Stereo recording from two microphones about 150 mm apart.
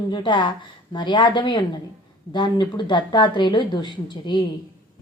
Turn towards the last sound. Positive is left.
turn(degrees=30)  # may be behind; listen again after turning